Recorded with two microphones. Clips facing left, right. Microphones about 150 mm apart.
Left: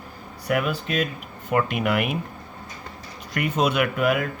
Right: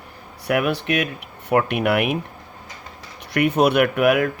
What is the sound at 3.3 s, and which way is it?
Speech, 60° right (ahead or behind).